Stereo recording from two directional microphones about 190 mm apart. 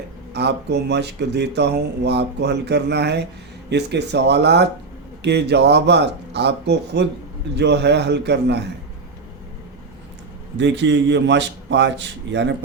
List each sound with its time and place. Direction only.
0.3 s speech: 60° right (ahead or behind)
10.6 s a man's voice: 70° right (ahead or behind)